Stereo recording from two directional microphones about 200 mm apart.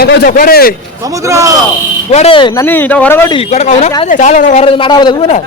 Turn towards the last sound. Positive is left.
turn(degrees=20)  # may be behind; listen again after turning